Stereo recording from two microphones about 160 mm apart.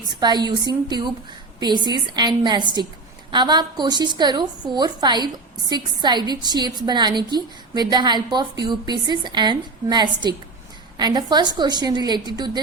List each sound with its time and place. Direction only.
0.2 s a woman's voice: 25° right (ahead or behind)